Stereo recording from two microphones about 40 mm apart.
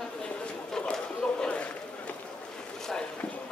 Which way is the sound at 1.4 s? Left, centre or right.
Left.